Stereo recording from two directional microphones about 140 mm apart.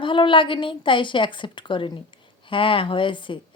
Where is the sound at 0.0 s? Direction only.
35° left (ahead or behind).